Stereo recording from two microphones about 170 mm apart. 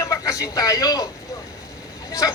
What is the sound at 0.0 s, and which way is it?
Speech, 20° left (ahead or behind).